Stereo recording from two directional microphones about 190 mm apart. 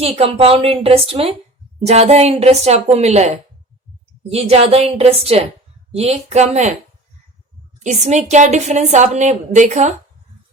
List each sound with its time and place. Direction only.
0.0 s a woman's voice: 30° right (ahead or behind)
7.9 s a woman's voice: 40° right (ahead or behind)